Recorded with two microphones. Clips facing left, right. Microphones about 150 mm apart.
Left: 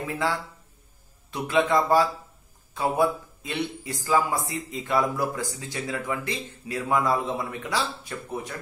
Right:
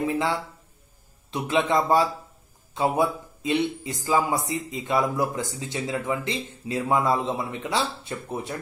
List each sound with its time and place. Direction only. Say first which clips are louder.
0.1 s speech: right 2 dB; 20° right (ahead or behind)